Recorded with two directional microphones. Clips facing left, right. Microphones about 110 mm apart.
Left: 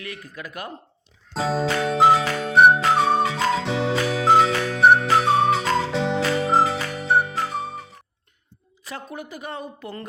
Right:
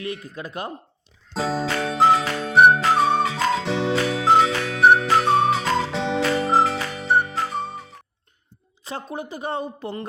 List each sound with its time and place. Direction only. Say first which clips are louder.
0.0 s speech: right 5 dB; 30° right (ahead or behind)
1.3 s music: left 1 dB; centre (ahead or behind)
8.8 s speech: right 3 dB; 30° right (ahead or behind)